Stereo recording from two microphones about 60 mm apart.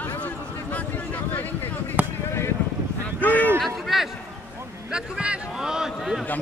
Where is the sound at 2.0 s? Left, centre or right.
Right.